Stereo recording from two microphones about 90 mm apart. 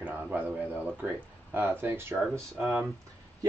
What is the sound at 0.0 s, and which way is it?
A man's voice, 20° right (ahead or behind).